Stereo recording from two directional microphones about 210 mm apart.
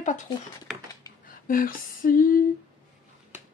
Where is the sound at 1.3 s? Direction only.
40° left (ahead or behind).